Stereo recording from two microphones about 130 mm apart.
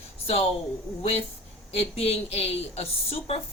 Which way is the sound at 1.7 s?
50° left (ahead or behind).